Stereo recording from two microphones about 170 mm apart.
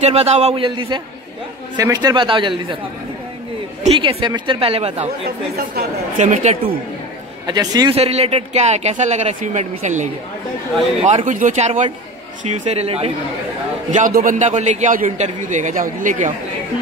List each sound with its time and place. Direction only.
0.0 s a man's voice: 40° right (ahead or behind)
3.8 s speech: 35° right (ahead or behind)
6.1 s speech: 45° right (ahead or behind)
7.4 s a man's voice: 25° right (ahead or behind)
7.9 s a man's voice: 35° right (ahead or behind)
13.9 s a man's voice: 50° right (ahead or behind)